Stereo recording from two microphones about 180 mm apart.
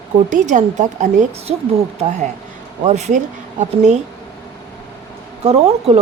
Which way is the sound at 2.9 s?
40° right (ahead or behind).